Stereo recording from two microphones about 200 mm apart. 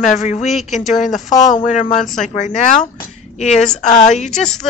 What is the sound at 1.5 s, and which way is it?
A woman's voice, 35° left (ahead or behind).